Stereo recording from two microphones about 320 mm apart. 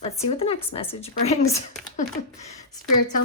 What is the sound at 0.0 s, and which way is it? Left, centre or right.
A woman's voice, centre.